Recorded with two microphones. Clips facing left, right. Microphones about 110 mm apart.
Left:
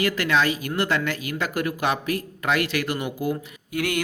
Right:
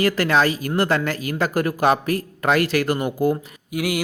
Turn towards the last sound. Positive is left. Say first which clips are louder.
# right 2 dB
turn(degrees=-10)  # may be behind; listen again after turning